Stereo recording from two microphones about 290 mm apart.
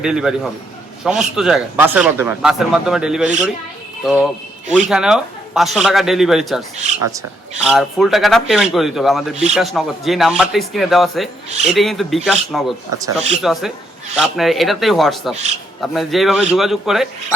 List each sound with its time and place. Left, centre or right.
0.0 s speech: centre
6.7 s speech: right
7.0 s speech: centre
7.6 s speech: centre
9.3 s speech: right
9.6 s speech: centre
13.0 s speech: centre